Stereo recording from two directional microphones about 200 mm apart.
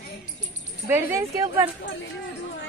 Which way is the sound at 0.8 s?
10° right (ahead or behind).